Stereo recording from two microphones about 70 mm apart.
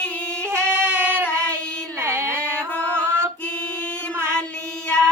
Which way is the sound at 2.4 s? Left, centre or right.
Centre.